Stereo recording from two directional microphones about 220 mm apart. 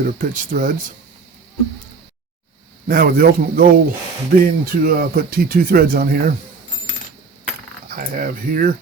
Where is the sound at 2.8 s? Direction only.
40° right (ahead or behind).